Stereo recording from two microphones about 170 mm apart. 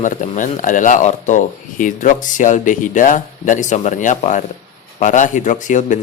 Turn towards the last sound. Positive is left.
turn(degrees=50)  # may be behind; listen again after turning